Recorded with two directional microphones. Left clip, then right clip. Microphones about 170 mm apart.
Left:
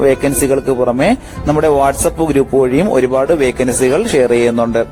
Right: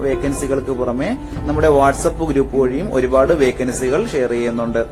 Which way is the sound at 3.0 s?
50° left (ahead or behind).